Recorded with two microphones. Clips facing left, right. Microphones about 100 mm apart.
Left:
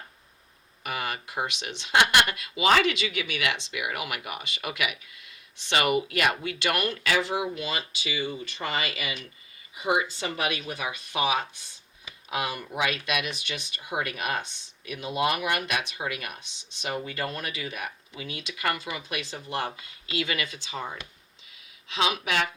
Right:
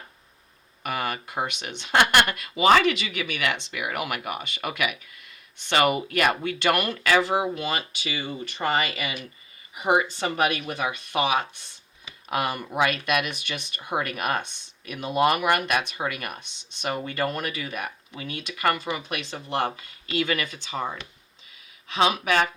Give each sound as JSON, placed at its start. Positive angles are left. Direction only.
{"t": 0.8, "sound": "speech", "side_deg": -50}
{"t": 21.8, "sound": "speech", "side_deg": -45}